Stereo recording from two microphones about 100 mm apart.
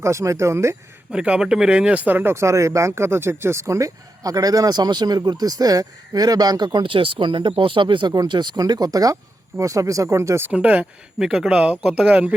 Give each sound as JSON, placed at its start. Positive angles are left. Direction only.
{"t": 0.0, "sound": "speech", "side_deg": -30}
{"t": 1.1, "sound": "speech", "side_deg": -10}
{"t": 10.5, "sound": "speech", "side_deg": -15}